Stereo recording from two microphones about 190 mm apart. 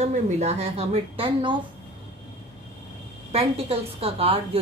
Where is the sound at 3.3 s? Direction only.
30° right (ahead or behind).